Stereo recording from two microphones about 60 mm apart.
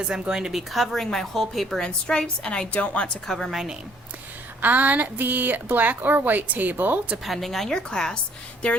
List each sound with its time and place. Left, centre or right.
0.0 s a woman's voice: centre
0.7 s a woman's voice: centre; by 3.1 s left
3.2 s a woman's voice: centre
3.5 s a woman's voice: centre
4.6 s speech: right
7.3 s a woman's voice: centre